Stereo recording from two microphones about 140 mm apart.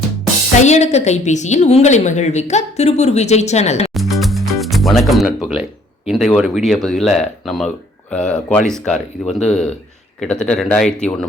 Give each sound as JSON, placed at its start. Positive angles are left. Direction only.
{"t": 0.6, "sound": "a woman's voice", "side_deg": 55}
{"t": 3.9, "sound": "music", "side_deg": 0}
{"t": 6.1, "sound": "speech", "side_deg": 0}